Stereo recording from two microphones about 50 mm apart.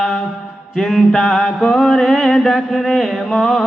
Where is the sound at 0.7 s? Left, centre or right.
Centre.